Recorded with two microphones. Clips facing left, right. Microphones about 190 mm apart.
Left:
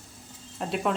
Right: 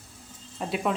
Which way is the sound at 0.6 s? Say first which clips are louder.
Even; centre (ahead or behind).